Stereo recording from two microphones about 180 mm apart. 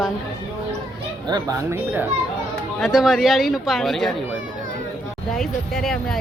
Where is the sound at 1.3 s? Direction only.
20° right (ahead or behind).